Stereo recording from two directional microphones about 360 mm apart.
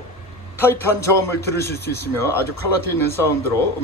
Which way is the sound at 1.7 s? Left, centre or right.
Left.